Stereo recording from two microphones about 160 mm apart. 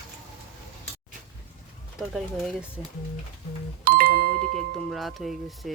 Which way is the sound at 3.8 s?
65° right (ahead or behind).